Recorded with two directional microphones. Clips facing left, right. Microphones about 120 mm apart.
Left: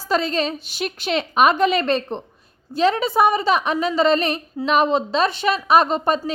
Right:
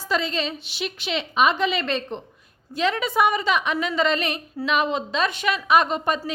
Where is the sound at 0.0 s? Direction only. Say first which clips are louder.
Left 4 dB; 40° left (ahead or behind).